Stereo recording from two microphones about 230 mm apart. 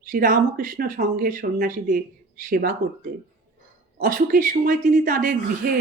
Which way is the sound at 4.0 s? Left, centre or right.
Right.